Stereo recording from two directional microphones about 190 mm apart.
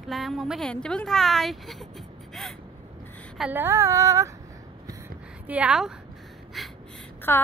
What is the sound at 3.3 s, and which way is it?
Child singing, 5° right (ahead or behind).